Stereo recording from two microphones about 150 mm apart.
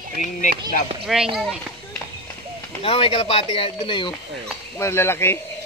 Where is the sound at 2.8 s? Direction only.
35° left (ahead or behind).